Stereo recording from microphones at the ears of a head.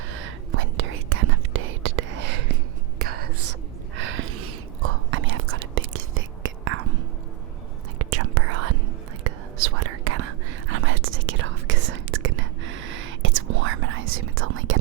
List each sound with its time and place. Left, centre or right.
0.1 s whispering: right